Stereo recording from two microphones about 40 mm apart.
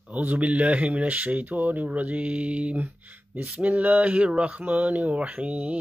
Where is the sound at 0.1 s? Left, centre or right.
Right.